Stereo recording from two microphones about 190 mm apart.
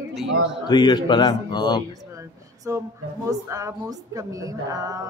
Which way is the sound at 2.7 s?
15° right (ahead or behind).